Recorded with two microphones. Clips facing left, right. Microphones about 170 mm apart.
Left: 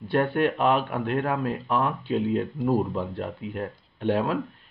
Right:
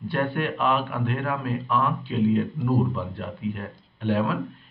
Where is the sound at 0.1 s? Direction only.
40° left (ahead or behind).